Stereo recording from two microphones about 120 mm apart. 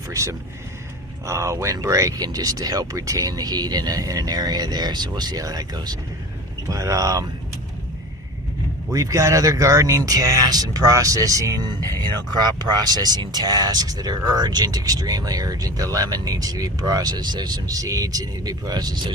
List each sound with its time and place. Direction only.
0.1 s speech: 25° right (ahead or behind)
8.9 s speech: 30° right (ahead or behind)